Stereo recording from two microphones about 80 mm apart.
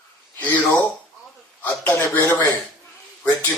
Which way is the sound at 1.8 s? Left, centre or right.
Left.